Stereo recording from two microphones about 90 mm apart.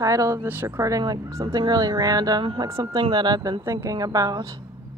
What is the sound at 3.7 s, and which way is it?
Speech, 35° right (ahead or behind).